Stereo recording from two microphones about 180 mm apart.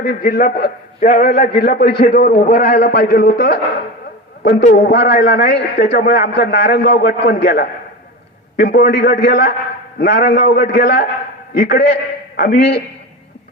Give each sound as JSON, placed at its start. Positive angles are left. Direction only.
{"t": 0.0, "sound": "a man's voice", "side_deg": 55}
{"t": 2.7, "sound": "a man's voice", "side_deg": 70}
{"t": 5.9, "sound": "a man's voice", "side_deg": 60}